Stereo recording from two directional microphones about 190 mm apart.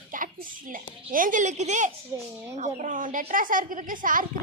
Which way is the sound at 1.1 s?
45° right (ahead or behind).